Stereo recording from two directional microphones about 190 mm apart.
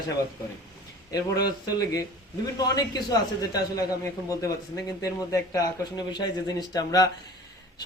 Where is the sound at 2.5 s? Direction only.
20° left (ahead or behind).